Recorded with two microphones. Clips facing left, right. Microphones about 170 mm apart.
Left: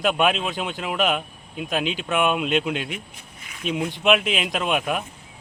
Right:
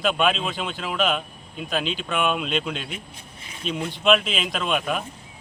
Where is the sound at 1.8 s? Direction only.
55° left (ahead or behind).